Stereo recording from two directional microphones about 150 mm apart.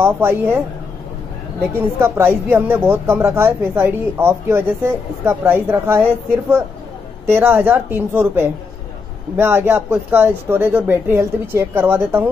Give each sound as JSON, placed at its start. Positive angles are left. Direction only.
{"t": 0.0, "sound": "speech", "side_deg": -15}
{"t": 2.0, "sound": "speech", "side_deg": -15}